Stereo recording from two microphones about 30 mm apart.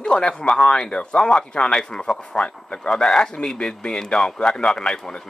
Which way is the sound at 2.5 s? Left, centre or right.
Left.